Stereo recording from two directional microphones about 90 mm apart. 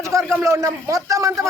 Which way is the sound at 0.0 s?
35° right (ahead or behind).